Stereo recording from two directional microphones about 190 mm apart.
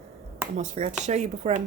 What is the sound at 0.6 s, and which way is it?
Speech, 35° right (ahead or behind).